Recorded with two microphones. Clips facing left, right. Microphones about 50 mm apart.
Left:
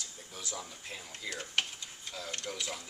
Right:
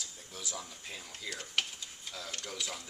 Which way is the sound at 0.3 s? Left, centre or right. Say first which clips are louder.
Left 1 dB; centre.